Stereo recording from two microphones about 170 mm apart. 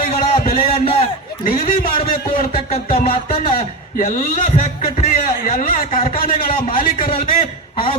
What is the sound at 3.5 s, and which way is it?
A man's voice, 55° left (ahead or behind).